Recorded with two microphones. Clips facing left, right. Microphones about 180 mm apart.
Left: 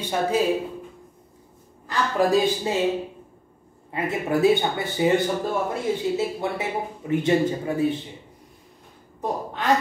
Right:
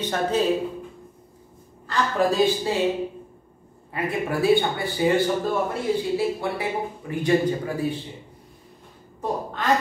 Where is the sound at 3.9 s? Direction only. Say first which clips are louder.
Left 2 dB; 20° left (ahead or behind).